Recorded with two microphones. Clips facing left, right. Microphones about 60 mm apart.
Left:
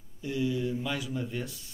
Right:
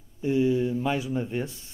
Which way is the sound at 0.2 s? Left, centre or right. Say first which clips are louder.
Right 7 dB; right.